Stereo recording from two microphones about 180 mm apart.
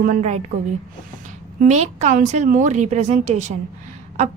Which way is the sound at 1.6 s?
40° right (ahead or behind).